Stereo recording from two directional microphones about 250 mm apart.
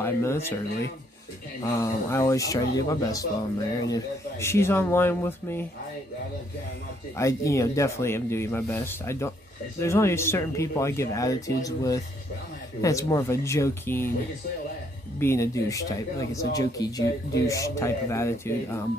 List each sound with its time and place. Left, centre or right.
0.0 s speech: centre
1.6 s speech: centre
7.2 s speech: centre
15.1 s speech: centre